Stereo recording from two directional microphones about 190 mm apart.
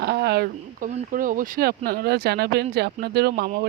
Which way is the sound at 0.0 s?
60° right (ahead or behind).